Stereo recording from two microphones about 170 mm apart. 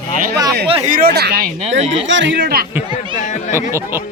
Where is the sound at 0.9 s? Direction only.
55° right (ahead or behind).